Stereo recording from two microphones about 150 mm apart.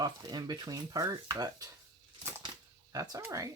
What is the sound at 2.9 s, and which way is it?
Speech, 25° right (ahead or behind).